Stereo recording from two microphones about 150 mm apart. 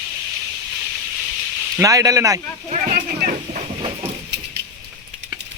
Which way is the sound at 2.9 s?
65° right (ahead or behind).